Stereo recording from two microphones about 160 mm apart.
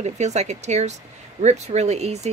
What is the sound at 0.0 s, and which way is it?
Speech, 45° right (ahead or behind).